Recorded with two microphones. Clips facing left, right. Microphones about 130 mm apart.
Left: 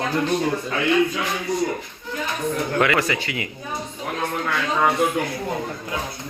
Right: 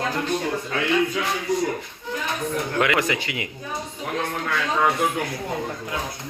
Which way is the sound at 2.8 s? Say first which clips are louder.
Left 1 dB; 15° right (ahead or behind).